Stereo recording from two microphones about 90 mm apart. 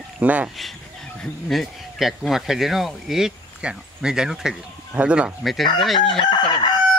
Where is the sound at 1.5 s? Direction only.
Centre (ahead or behind).